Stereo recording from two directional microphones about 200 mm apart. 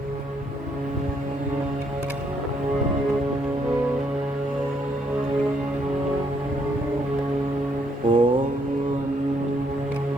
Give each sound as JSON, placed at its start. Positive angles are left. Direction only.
{"t": 8.0, "sound": "music", "side_deg": -25}